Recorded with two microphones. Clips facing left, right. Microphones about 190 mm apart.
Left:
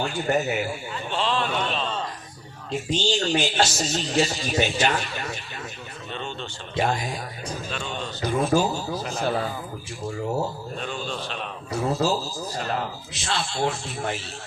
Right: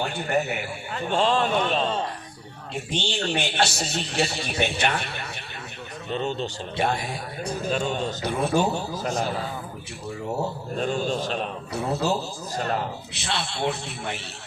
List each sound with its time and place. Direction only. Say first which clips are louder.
0.1 s a man's voice: left 2 dB; 60° right (ahead or behind); by 1.9 s 45° right (ahead or behind)
2.7 s a man's voice: left 4 dB; 60° right (ahead or behind)
6.1 s a man's voice: right 7 dB; 40° right (ahead or behind)
6.7 s a man's voice: left 2 dB; 60° right (ahead or behind)
7.7 s a man's voice: right 9 dB; 40° right (ahead or behind)
8.2 s a man's voice: left 3 dB; 60° right (ahead or behind)
10.8 s a man's voice: right 9 dB; 45° right (ahead or behind)
11.7 s a man's voice: left 2 dB; 65° right (ahead or behind)